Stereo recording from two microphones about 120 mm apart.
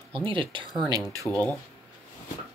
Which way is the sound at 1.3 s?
15° left (ahead or behind).